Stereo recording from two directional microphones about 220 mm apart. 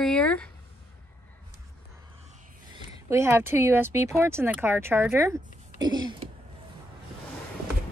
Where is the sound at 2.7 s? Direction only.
10° right (ahead or behind).